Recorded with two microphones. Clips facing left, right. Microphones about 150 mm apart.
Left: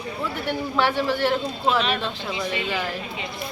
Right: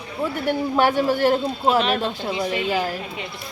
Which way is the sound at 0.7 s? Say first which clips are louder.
Right 3 dB; 45° right (ahead or behind).